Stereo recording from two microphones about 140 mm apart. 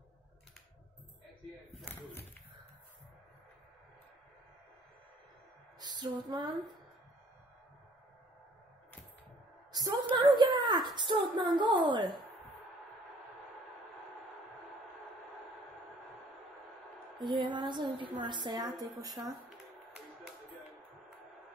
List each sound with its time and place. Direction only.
5.9 s a woman's voice: 35° right (ahead or behind)
9.7 s a sound: 30° right (ahead or behind)
11.0 s a woman's voice: 35° right (ahead or behind)
17.4 s a woman's voice: 35° right (ahead or behind)